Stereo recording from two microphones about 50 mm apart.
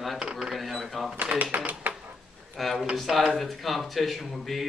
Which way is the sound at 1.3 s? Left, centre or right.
Right.